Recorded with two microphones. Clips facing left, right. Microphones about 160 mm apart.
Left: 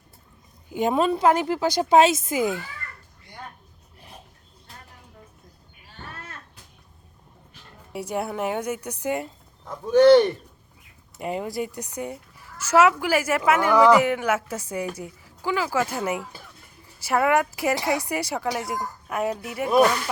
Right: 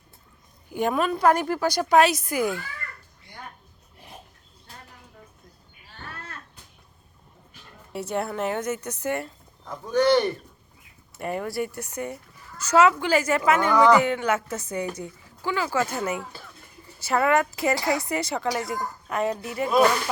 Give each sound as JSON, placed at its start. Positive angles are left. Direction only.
{"t": 0.7, "sound": "a woman's voice", "side_deg": 20}
{"t": 7.9, "sound": "a woman's voice", "side_deg": 10}
{"t": 11.2, "sound": "a woman's voice", "side_deg": 15}